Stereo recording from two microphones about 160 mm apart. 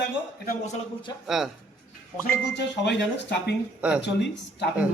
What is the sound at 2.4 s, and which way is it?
Speech, 90° left.